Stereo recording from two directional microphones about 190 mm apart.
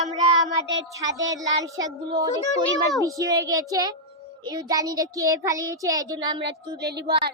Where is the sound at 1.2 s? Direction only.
20° right (ahead or behind).